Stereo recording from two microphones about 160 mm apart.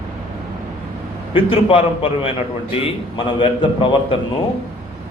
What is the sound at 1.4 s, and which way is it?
A man's voice, 35° left (ahead or behind).